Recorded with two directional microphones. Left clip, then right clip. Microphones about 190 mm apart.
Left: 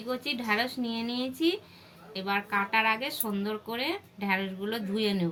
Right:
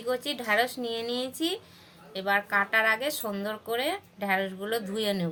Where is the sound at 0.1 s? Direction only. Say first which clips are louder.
Right 2 dB; 55° right (ahead or behind).